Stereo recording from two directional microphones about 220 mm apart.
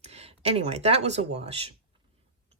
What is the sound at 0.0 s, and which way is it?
Speech, 30° right (ahead or behind).